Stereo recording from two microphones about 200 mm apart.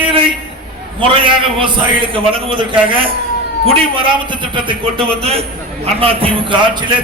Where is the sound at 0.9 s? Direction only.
25° right (ahead or behind).